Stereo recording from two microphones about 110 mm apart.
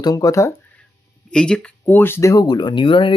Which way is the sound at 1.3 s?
10° left (ahead or behind).